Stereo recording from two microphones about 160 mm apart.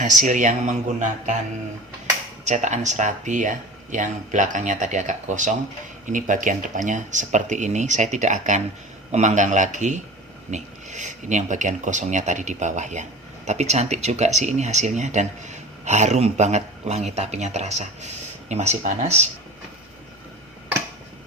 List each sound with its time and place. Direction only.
0.0 s speech: 50° right (ahead or behind)
2.4 s speech: 45° right (ahead or behind)